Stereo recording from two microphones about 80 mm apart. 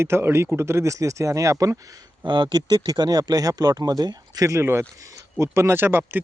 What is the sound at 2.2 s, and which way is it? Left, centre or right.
Speech, right.